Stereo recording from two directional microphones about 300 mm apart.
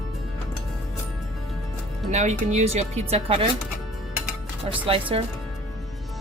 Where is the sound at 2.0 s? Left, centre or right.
Right.